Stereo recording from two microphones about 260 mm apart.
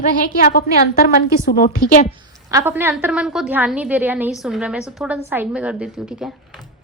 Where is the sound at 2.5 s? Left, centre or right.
Centre.